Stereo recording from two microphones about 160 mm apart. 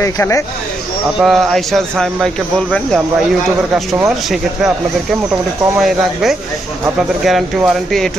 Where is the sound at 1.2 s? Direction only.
Centre (ahead or behind).